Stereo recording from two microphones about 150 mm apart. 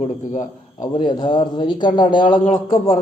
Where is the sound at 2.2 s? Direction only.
60° left (ahead or behind).